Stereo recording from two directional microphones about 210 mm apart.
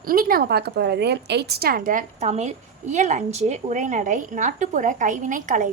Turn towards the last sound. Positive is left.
turn(degrees=-35)  # may be behind; listen again after turning